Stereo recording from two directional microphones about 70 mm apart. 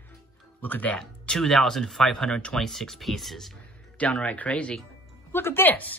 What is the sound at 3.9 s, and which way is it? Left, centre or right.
Speech, left.